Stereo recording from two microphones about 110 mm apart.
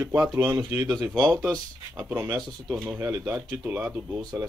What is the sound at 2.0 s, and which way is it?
A man's voice, 15° right (ahead or behind).